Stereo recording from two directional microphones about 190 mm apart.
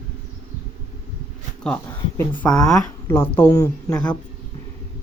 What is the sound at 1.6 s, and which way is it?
Speech, 10° left (ahead or behind).